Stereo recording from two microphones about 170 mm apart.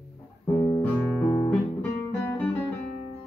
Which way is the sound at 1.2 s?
15° left (ahead or behind).